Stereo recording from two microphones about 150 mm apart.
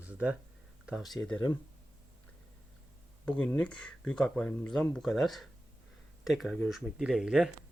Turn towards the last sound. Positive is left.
turn(degrees=-5)  # may be behind; listen again after turning